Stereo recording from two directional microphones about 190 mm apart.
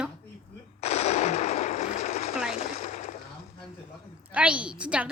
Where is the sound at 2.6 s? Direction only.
40° left (ahead or behind).